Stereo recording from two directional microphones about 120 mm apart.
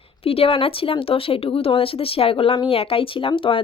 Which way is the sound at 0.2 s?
55° left (ahead or behind).